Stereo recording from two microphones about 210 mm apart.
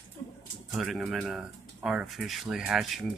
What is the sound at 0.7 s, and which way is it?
Speech, centre (ahead or behind).